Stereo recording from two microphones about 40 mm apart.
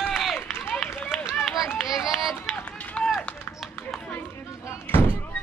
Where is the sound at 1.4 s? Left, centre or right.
Centre.